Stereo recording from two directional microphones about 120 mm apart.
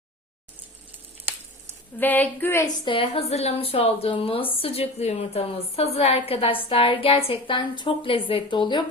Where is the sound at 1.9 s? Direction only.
15° left (ahead or behind).